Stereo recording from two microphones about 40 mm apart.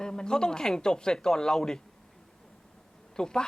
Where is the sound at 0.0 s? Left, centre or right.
Centre.